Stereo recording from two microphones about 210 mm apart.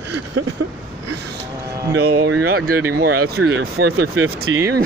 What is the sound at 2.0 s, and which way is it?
Speech, 50° right (ahead or behind).